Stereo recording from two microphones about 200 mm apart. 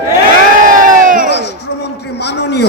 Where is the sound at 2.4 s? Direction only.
60° left (ahead or behind).